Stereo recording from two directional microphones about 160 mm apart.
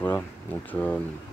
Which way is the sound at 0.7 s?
10° left (ahead or behind).